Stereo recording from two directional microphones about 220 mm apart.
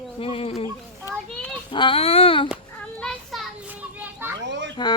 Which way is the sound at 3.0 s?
Centre (ahead or behind).